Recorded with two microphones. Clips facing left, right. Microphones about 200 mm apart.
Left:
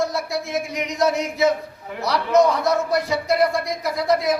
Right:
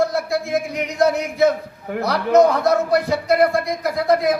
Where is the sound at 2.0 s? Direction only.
55° right (ahead or behind).